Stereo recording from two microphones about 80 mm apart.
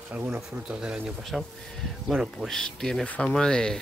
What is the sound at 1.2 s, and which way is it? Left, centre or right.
Speech, centre.